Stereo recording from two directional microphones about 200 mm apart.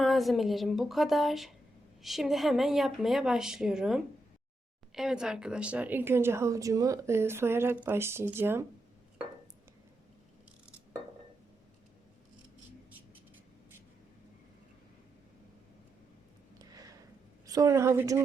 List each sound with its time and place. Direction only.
0.0 s a woman's voice: centre (ahead or behind)
16.6 s a sound: 20° right (ahead or behind)
17.4 s a woman's voice: 15° right (ahead or behind)